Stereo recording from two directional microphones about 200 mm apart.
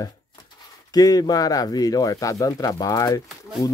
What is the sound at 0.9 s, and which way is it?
Speech, 20° left (ahead or behind).